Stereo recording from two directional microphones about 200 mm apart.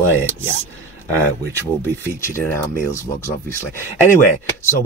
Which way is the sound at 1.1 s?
10° left (ahead or behind).